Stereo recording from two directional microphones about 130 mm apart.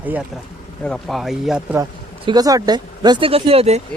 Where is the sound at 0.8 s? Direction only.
5° left (ahead or behind).